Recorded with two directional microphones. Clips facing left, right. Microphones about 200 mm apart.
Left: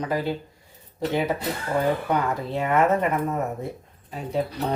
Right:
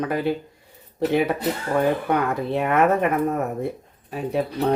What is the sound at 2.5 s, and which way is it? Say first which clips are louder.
Speech: right 2 dB; 60° right (ahead or behind).